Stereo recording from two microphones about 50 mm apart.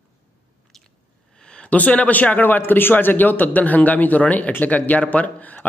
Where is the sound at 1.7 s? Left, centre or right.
Left.